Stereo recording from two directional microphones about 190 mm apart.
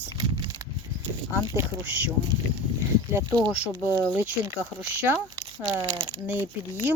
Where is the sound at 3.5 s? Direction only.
10° right (ahead or behind).